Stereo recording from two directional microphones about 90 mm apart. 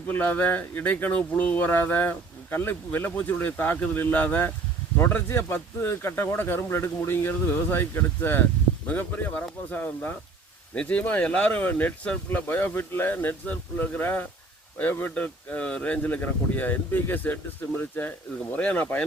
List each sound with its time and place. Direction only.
0.1 s speech: 15° left (ahead or behind)